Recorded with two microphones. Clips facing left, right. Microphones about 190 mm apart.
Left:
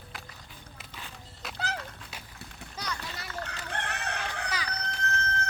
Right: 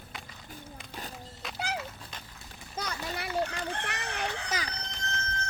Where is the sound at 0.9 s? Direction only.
40° right (ahead or behind).